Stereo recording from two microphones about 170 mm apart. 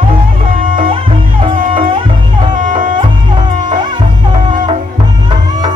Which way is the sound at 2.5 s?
50° right (ahead or behind).